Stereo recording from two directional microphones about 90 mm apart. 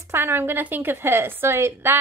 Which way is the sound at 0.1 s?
25° right (ahead or behind).